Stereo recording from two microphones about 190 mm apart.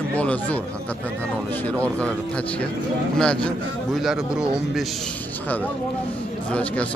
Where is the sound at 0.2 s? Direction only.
5° left (ahead or behind).